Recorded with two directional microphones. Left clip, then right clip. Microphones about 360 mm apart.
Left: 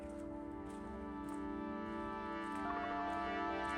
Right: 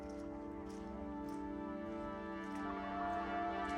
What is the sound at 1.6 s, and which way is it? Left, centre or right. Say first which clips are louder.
Music: left 1 dB; centre.